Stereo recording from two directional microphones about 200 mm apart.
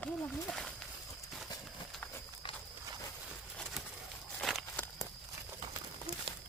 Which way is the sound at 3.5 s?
5° left (ahead or behind).